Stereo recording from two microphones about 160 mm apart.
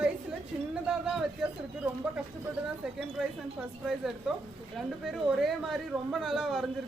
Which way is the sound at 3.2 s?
Centre (ahead or behind).